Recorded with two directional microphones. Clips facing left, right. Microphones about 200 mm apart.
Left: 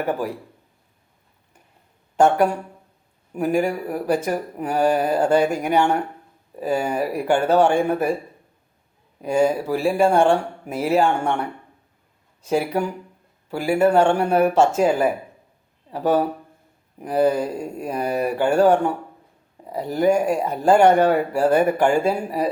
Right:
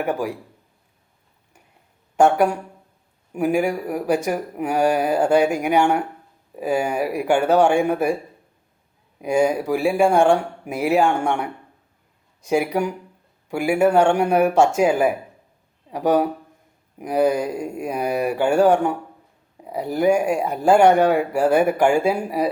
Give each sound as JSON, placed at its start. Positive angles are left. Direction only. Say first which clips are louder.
{"t": 0.0, "sound": "speech", "louder": "right 1 dB", "side_deg": -10}
{"t": 2.1, "sound": "speech", "louder": "right 1 dB", "side_deg": -10}
{"t": 9.2, "sound": "speech", "louder": "even", "side_deg": -10}